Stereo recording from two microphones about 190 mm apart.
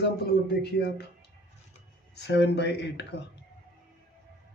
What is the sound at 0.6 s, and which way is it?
Speech, 60° left (ahead or behind).